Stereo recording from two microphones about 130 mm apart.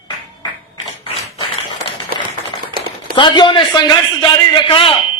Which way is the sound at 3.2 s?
35° left (ahead or behind).